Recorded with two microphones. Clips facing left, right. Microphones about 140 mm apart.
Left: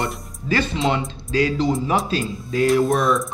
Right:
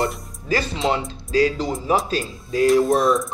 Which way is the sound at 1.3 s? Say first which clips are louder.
Right 1 dB; 35° right (ahead or behind).